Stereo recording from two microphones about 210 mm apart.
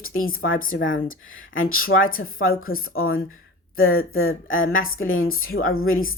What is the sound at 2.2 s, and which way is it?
Speech, 75° left (ahead or behind).